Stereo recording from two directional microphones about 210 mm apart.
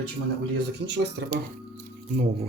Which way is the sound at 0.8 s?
50° right (ahead or behind).